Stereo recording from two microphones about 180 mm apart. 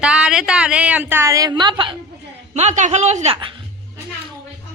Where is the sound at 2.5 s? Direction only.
40° right (ahead or behind).